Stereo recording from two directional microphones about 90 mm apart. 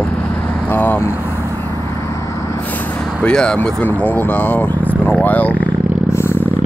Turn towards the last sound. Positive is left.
turn(degrees=25)  # may be behind; listen again after turning